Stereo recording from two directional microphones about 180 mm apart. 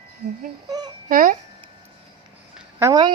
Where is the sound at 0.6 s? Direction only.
20° right (ahead or behind).